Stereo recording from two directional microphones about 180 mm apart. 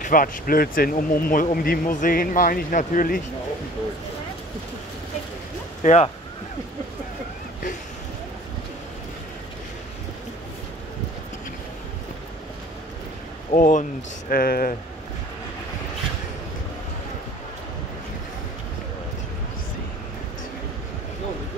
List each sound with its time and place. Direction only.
0.0 s speech: 50° left (ahead or behind)
5.8 s speech: 40° left (ahead or behind)
13.5 s speech: 45° left (ahead or behind)